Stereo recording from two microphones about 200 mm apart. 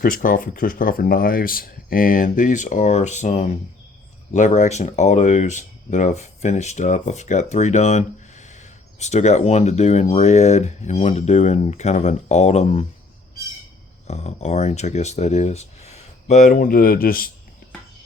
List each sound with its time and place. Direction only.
0.0 s speech: 45° left (ahead or behind)
14.1 s speech: 35° left (ahead or behind)